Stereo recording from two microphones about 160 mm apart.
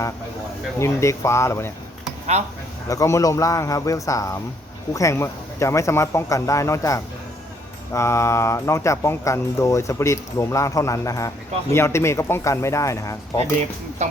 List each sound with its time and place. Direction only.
0.8 s speech: 15° left (ahead or behind)
2.9 s a man's voice: 20° left (ahead or behind)
14.0 s speech: 45° right (ahead or behind)